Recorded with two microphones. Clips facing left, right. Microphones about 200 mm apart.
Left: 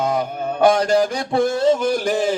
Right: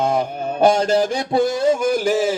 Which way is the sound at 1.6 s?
10° right (ahead or behind).